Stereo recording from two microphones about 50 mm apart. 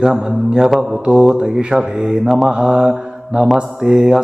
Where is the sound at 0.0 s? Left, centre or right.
Centre.